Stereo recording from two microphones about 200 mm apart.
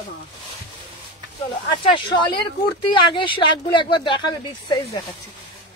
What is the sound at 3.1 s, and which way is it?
Speech, 25° left (ahead or behind).